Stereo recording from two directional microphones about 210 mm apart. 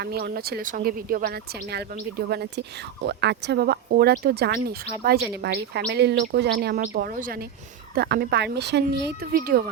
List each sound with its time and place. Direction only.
0.0 s speech: 50° right (ahead or behind)